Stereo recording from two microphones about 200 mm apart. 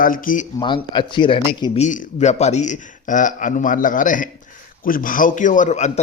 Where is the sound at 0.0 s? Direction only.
45° left (ahead or behind).